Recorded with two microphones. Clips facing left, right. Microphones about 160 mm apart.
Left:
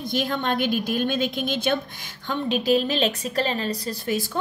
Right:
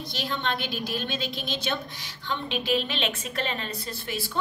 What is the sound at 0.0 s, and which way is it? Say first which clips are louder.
A woman's voice: left 6 dB; 50° left (ahead or behind).